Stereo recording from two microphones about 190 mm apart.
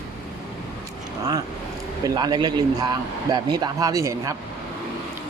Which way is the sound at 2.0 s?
20° right (ahead or behind).